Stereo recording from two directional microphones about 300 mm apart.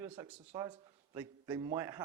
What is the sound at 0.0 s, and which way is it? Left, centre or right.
A man's voice, centre.